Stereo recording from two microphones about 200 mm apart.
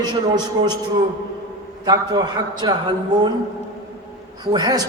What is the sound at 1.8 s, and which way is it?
Speech, 20° right (ahead or behind).